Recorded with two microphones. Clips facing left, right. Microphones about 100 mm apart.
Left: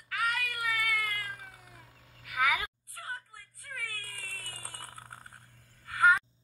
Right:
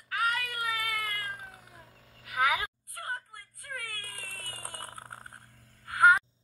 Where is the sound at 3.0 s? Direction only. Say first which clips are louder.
Right 3 dB; 60° right (ahead or behind).